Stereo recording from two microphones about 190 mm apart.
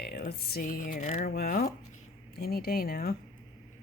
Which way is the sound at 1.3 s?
50° left (ahead or behind).